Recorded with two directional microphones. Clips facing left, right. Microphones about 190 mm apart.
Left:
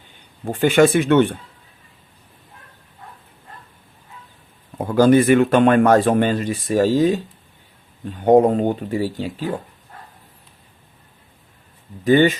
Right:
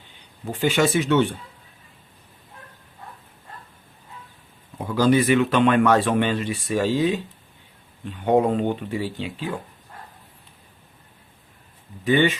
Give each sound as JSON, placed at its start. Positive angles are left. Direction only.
{"t": 0.4, "sound": "speech", "side_deg": 50}
{"t": 4.8, "sound": "speech", "side_deg": 50}
{"t": 12.0, "sound": "speech", "side_deg": 40}